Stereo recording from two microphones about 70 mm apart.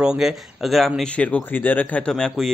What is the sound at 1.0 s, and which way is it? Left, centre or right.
Speech, centre.